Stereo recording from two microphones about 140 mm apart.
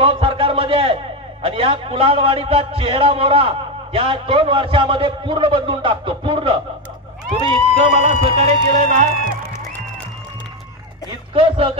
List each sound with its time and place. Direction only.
0.0 s a sound: 40° right (ahead or behind)
1.4 s a man's voice: 45° right (ahead or behind)
7.7 s speech: 50° right (ahead or behind)
11.1 s a man's voice: 40° right (ahead or behind)